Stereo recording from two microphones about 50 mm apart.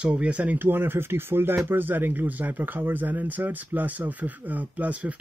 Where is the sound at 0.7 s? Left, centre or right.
Right.